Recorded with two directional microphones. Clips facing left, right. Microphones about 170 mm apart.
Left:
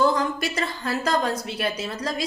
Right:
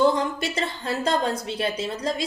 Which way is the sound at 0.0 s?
25° right (ahead or behind).